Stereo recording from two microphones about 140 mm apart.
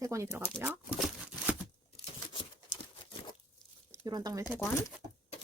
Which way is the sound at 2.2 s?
35° left (ahead or behind).